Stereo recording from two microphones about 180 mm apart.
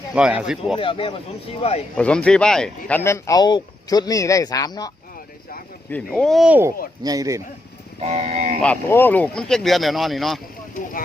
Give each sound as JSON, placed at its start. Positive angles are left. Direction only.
{"t": 0.1, "sound": "speech", "side_deg": -5}
{"t": 0.8, "sound": "speech", "side_deg": 30}
{"t": 2.0, "sound": "speech", "side_deg": 5}
{"t": 5.9, "sound": "speech", "side_deg": 5}
{"t": 8.0, "sound": "speech", "side_deg": -35}
{"t": 8.6, "sound": "speech", "side_deg": 10}